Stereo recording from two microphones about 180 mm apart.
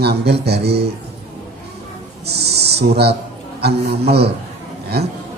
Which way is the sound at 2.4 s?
65° right (ahead or behind).